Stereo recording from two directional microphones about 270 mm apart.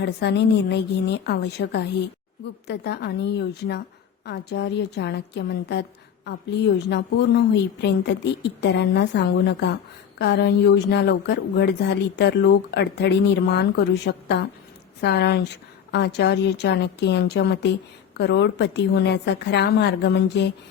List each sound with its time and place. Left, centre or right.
0.0 s speech: left